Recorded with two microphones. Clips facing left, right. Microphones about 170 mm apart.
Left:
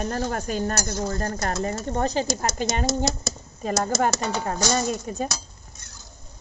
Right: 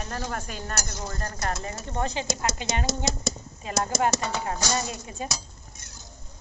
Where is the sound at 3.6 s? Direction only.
45° left (ahead or behind).